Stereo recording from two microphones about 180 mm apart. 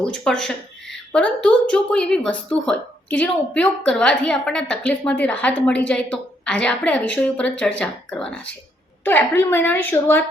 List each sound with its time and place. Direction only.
0.0 s a woman's voice: 5° left (ahead or behind)